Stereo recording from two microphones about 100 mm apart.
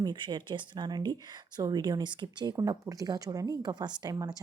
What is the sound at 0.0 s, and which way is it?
A woman's voice, 45° right (ahead or behind).